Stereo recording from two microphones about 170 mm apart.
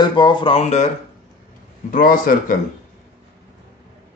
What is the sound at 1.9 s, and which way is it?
Speech, 55° left (ahead or behind).